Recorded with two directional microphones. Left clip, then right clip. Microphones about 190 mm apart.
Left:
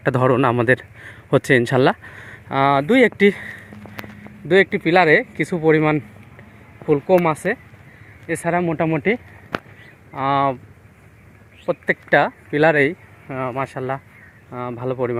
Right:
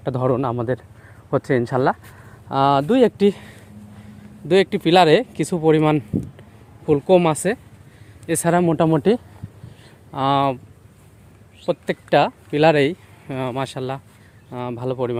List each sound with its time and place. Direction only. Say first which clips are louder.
0.0 s speech: left 4 dB; 10° left (ahead or behind)
2.5 s speech: left 1 dB; 10° right (ahead or behind)
7.1 s speech: right 1 dB; 30° right (ahead or behind)
8.8 s speech: right 2 dB; 25° right (ahead or behind)
11.9 s speech: left 1 dB; 10° right (ahead or behind)
13.2 s speech: left 1 dB; 35° right (ahead or behind); by 15.1 s 15° right (ahead or behind)